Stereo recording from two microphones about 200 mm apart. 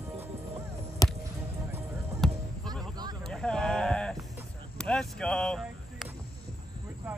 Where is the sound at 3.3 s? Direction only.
5° left (ahead or behind).